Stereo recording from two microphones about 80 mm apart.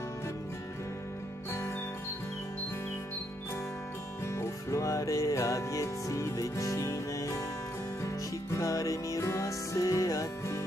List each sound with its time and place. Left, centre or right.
4.3 s music: left
8.5 s music: left